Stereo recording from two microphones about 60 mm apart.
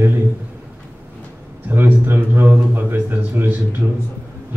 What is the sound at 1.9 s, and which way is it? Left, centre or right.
A man's voice, right.